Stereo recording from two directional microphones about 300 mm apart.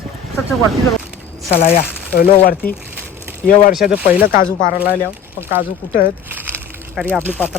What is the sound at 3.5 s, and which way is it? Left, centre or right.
Speech, left.